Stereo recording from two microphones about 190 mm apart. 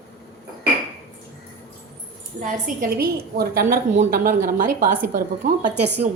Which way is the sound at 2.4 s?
45° right (ahead or behind).